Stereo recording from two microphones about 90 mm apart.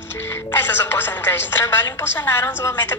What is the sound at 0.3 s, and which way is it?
A woman's voice, 25° left (ahead or behind).